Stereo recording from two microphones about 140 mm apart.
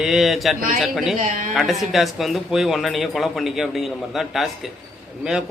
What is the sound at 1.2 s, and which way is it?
Speech, 70° right (ahead or behind).